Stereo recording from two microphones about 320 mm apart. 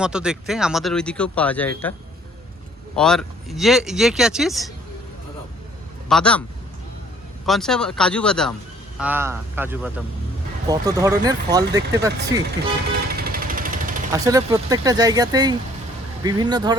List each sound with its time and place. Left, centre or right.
0.0 s speech: centre
2.9 s speech: centre
6.1 s speech: centre
7.4 s speech: centre
13.1 s jackhammer: right
14.1 s speech: centre